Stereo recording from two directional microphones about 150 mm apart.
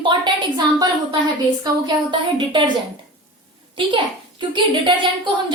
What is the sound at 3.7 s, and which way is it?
A woman's voice, 30° right (ahead or behind).